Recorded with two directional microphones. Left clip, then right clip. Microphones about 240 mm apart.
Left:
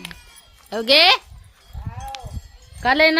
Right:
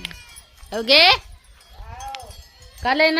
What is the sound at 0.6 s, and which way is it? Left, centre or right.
Speech, centre.